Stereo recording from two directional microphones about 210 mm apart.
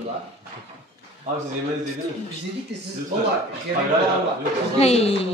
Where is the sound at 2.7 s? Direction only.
55° right (ahead or behind).